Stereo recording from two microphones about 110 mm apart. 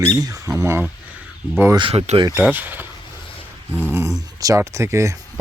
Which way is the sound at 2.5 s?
15° right (ahead or behind).